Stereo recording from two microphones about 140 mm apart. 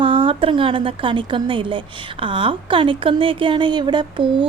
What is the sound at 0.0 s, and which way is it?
A woman's voice, 35° right (ahead or behind).